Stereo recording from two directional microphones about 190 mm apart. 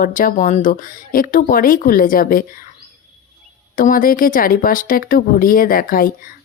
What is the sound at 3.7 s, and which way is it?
Speech, 45° left (ahead or behind).